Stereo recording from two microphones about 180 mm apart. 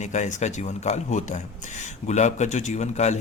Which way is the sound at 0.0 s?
40° left (ahead or behind).